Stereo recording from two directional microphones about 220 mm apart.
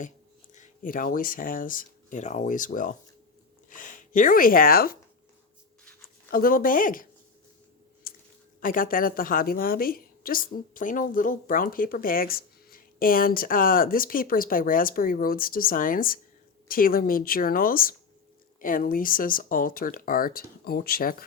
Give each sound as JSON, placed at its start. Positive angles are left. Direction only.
{"t": 0.5, "sound": "a woman's voice", "side_deg": 35}
{"t": 6.3, "sound": "a woman's voice", "side_deg": 40}
{"t": 8.1, "sound": "a sound", "side_deg": 40}
{"t": 8.6, "sound": "a woman's voice", "side_deg": 40}